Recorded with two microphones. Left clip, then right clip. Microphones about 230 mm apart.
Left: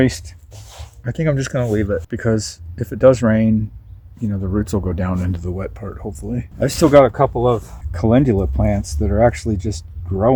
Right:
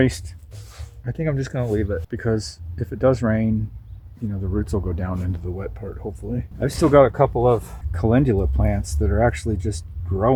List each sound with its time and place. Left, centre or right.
0.5 s a sound: left
1.0 s speech: left
7.1 s speech: left
7.9 s speech: left